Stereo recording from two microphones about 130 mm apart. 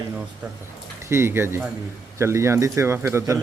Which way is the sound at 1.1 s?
20° right (ahead or behind).